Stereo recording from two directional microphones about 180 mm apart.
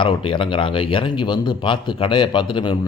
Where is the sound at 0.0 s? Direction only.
25° left (ahead or behind).